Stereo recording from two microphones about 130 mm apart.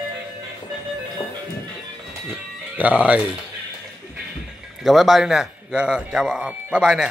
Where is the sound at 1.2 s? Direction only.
45° left (ahead or behind).